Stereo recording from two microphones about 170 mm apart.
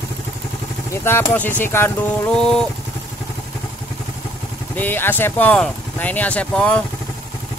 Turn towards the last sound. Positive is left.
turn(degrees=5)  # may be behind; listen again after turning